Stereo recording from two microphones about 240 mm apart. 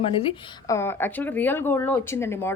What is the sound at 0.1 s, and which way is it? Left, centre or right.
Speech, left.